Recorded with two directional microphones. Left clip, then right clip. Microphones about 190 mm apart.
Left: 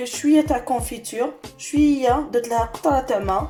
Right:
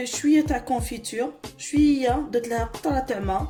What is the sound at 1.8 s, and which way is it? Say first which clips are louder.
Speech: left 3 dB; 15° right (ahead or behind).